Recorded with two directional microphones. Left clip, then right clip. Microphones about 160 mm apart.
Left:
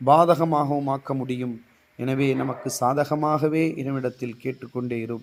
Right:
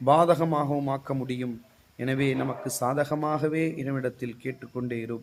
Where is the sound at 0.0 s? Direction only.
15° left (ahead or behind).